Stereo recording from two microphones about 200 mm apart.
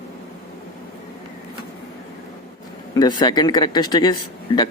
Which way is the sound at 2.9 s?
20° left (ahead or behind).